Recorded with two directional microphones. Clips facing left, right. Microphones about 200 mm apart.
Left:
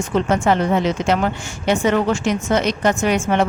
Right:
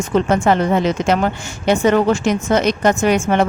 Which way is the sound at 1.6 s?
40° right (ahead or behind).